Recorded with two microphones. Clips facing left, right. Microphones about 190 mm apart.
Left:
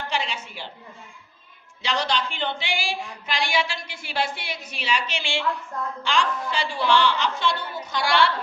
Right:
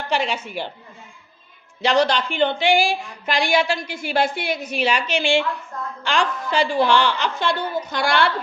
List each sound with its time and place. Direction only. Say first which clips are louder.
0.1 s a woman's voice: right 10 dB; 60° right (ahead or behind)
1.8 s a woman's voice: right 7 dB; 45° right (ahead or behind)